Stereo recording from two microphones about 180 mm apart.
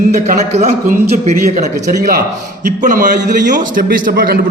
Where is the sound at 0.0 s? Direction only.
40° right (ahead or behind).